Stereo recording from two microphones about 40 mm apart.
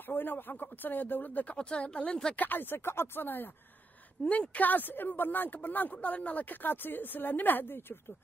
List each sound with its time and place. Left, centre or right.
0.0 s speech: left
1.6 s speech: left
2.3 s speech: left
4.2 s speech: left
5.9 s speech: left
6.5 s speech: left